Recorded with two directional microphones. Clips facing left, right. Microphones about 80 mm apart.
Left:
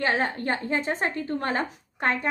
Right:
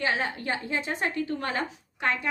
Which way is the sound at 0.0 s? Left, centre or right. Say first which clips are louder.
Left 3 dB; left.